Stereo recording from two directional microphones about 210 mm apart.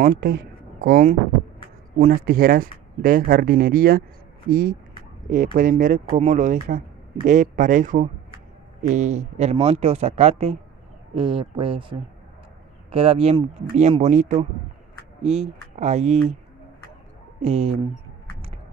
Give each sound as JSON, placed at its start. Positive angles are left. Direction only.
{"t": 0.0, "sound": "speech", "side_deg": -45}
{"t": 17.4, "sound": "speech", "side_deg": -30}